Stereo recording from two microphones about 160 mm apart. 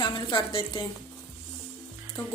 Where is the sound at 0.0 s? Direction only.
30° left (ahead or behind).